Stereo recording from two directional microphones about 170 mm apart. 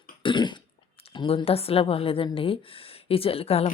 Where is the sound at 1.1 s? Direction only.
30° left (ahead or behind).